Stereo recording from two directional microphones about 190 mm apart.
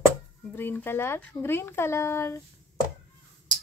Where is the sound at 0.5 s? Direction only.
10° left (ahead or behind).